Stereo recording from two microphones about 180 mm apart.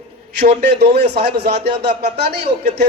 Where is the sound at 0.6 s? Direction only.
65° right (ahead or behind).